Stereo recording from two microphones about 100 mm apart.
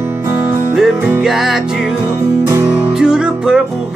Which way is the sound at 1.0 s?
20° right (ahead or behind).